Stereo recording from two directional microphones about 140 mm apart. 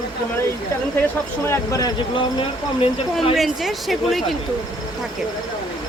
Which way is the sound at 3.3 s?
Centre (ahead or behind).